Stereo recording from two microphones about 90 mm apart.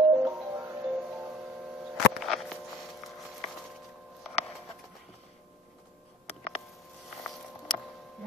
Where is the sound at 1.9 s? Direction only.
Centre (ahead or behind).